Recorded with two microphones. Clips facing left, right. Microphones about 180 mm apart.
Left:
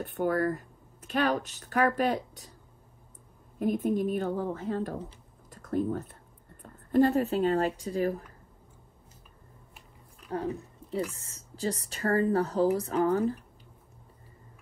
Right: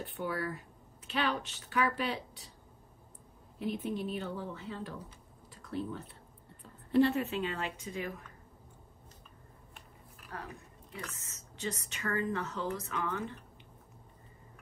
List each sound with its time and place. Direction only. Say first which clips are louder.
0.1 s speech: left 10 dB; 50° left (ahead or behind)
3.5 s speech: left 8 dB; 45° left (ahead or behind)
10.3 s speech: left 13 dB; 30° left (ahead or behind)